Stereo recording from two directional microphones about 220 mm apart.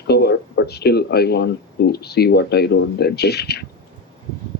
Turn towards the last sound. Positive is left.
turn(degrees=45)  # may be behind; listen again after turning